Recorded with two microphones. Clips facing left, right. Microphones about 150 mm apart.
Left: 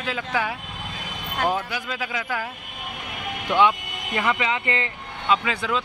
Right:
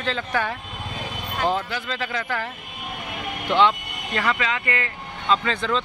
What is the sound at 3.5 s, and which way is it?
Speech, 10° left (ahead or behind).